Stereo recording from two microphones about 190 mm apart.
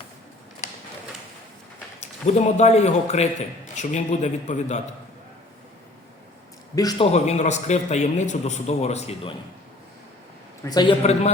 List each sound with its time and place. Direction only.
2.2 s a man's voice: 35° left (ahead or behind)
6.7 s a man's voice: 20° left (ahead or behind)
7.1 s a man's voice: 35° left (ahead or behind)
10.6 s a man's voice: 20° left (ahead or behind)
11.0 s a man's voice: 35° left (ahead or behind)